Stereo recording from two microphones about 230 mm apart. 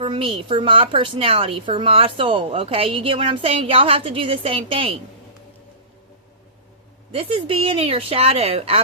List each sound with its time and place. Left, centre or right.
0.0 s a woman's voice: right
7.1 s a woman's voice: right